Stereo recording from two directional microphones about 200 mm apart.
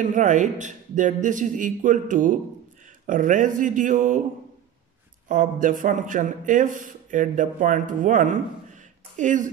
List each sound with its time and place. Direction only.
0.1 s speech: 35° right (ahead or behind)
5.3 s speech: 40° right (ahead or behind)